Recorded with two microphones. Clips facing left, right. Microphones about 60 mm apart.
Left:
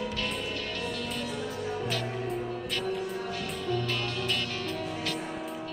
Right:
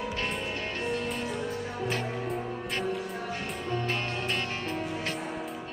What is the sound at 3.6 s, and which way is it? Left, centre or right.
Music, right.